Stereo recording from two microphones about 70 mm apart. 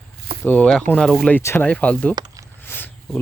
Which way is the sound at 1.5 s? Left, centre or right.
Left.